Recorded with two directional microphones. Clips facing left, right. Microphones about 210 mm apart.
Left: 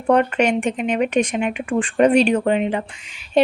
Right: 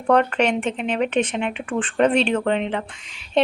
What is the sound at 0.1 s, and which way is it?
A woman's voice, 10° left (ahead or behind).